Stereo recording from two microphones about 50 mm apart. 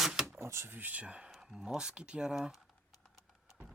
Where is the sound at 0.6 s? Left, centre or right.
Right.